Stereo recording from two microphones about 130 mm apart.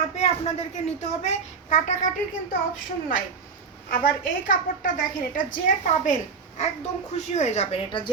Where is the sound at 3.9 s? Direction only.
90° left.